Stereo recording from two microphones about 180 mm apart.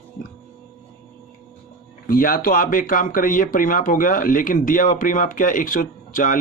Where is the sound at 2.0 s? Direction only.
50° left (ahead or behind).